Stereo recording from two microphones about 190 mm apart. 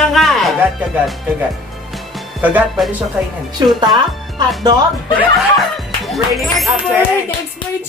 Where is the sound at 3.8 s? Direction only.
20° right (ahead or behind).